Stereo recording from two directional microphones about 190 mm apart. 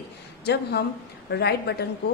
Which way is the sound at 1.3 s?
60° left (ahead or behind).